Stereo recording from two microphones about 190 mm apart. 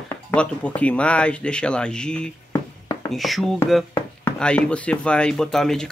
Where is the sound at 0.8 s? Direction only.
5° left (ahead or behind).